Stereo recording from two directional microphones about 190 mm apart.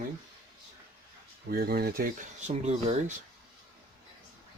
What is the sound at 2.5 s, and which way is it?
Speech, 35° right (ahead or behind).